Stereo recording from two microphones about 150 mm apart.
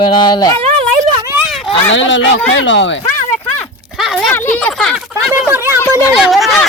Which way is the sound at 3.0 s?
10° left (ahead or behind).